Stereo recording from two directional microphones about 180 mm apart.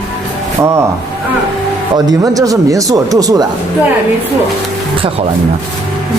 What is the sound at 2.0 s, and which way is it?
Speech, 20° right (ahead or behind).